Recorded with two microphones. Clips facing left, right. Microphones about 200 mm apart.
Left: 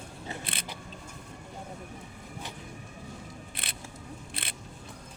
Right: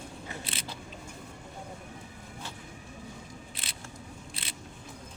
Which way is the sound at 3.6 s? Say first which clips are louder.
Left 1 dB; 55° left (ahead or behind).